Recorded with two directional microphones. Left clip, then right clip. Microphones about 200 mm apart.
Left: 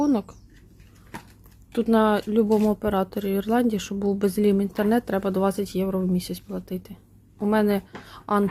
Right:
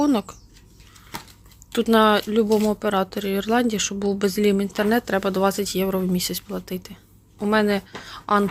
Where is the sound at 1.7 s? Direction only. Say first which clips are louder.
Right 4 dB; 5° left (ahead or behind).